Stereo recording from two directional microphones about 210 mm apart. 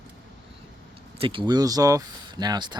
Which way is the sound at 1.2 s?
25° right (ahead or behind).